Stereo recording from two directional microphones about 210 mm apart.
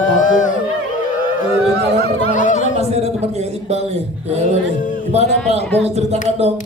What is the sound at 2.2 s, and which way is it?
Speech, 35° left (ahead or behind).